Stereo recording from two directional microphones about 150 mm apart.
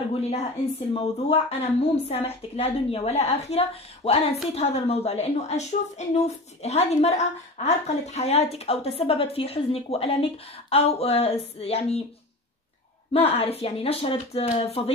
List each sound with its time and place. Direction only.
0.1 s a woman's voice: 45° left (ahead or behind)
13.1 s a woman's voice: 40° left (ahead or behind)